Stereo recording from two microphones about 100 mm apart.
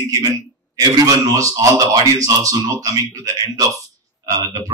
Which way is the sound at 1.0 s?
35° right (ahead or behind).